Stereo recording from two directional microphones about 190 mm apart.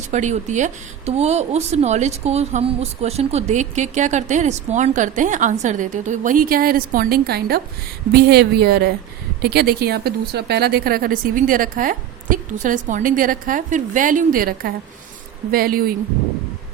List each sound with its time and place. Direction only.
0.1 s a woman's voice: 40° right (ahead or behind)